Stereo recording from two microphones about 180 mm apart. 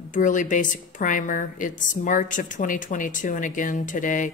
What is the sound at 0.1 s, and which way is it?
A woman's voice, 45° left (ahead or behind).